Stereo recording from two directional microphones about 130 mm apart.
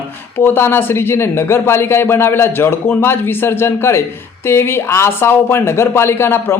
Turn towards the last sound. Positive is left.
turn(degrees=20)  # may be behind; listen again after turning